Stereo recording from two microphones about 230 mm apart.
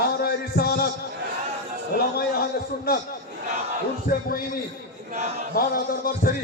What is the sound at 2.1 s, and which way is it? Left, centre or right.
A man's voice, left.